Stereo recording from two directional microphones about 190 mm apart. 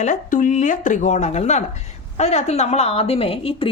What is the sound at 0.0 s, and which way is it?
A woman's voice, 40° left (ahead or behind).